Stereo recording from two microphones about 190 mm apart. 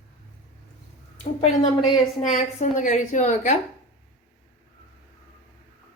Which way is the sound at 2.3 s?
40° left (ahead or behind).